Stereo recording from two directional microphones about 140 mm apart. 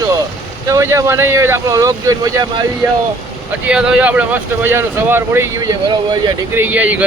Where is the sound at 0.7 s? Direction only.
20° right (ahead or behind).